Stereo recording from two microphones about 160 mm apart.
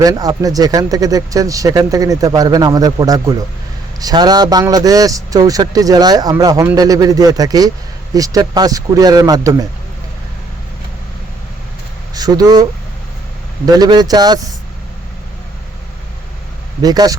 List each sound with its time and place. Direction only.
0.0 s speech: 20° right (ahead or behind)
12.1 s speech: 25° right (ahead or behind)
13.7 s speech: 25° right (ahead or behind)
16.8 s speech: 25° right (ahead or behind)